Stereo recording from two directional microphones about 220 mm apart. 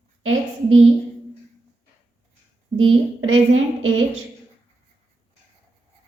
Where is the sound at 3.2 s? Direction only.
65° right (ahead or behind).